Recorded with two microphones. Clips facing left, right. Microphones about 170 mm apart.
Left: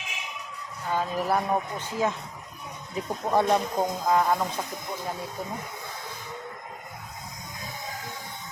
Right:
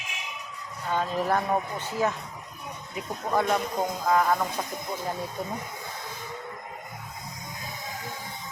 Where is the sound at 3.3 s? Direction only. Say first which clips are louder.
Left 2 dB; 25° left (ahead or behind).